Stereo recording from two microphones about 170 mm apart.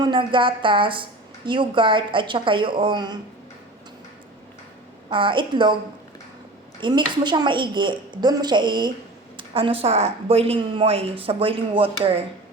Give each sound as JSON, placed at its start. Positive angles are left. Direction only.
{"t": 0.0, "sound": "a woman's voice", "side_deg": -30}
{"t": 5.0, "sound": "a woman's voice", "side_deg": -30}
{"t": 6.7, "sound": "a woman's voice", "side_deg": -25}